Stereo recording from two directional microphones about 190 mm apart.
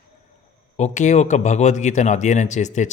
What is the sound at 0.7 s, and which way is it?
A man's voice, 40° left (ahead or behind).